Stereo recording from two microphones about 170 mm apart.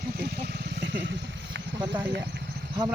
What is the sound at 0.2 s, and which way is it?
Vehicle, 70° right (ahead or behind).